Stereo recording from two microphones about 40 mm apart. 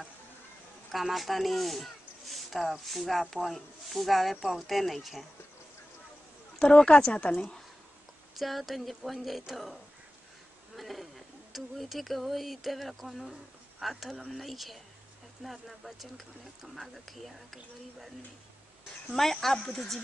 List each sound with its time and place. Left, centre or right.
1.1 s speech: centre
6.6 s speech: left
8.4 s speech: centre
10.8 s speech: centre
19.0 s speech: centre